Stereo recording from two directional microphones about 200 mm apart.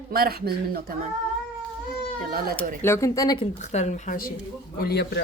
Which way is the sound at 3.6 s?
35° left (ahead or behind).